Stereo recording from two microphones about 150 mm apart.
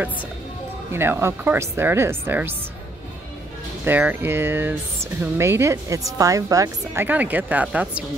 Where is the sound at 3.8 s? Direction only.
10° right (ahead or behind).